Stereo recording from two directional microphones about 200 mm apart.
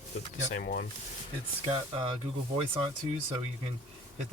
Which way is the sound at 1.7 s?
25° right (ahead or behind).